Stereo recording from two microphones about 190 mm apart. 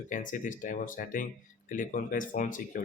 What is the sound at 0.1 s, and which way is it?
Speech, 45° left (ahead or behind).